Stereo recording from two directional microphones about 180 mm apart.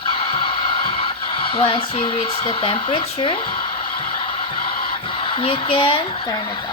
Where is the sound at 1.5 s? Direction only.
30° left (ahead or behind).